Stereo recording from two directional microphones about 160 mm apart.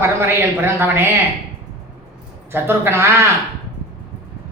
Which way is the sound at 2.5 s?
15° right (ahead or behind).